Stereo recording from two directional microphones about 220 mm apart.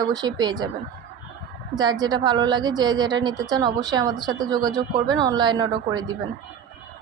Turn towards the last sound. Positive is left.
turn(degrees=-20)  # may be behind; listen again after turning